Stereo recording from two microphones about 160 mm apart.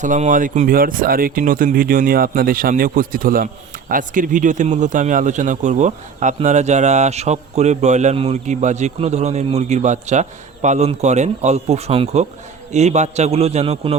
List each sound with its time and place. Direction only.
0.0 s speech: 50° right (ahead or behind)